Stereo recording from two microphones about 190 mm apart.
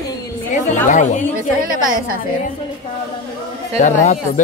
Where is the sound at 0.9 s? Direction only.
40° left (ahead or behind).